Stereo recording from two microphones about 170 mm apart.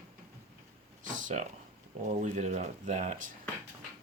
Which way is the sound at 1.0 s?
50° right (ahead or behind).